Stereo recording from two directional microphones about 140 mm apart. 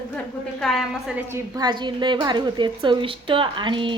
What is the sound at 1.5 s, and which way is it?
A woman's voice, 35° right (ahead or behind).